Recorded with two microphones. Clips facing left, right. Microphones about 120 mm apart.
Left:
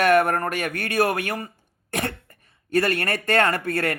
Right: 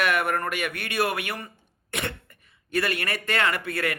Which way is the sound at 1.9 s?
40° left (ahead or behind).